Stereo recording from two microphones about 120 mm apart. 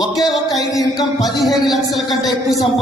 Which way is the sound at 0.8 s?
30° left (ahead or behind).